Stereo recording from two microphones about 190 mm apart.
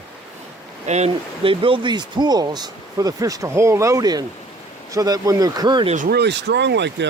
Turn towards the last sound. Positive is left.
turn(degrees=-65)  # may be behind; listen again after turning